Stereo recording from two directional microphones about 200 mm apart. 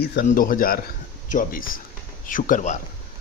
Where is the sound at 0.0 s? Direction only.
55° left (ahead or behind).